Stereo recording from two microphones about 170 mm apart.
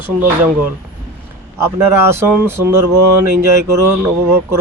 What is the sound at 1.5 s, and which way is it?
Speech, 15° right (ahead or behind).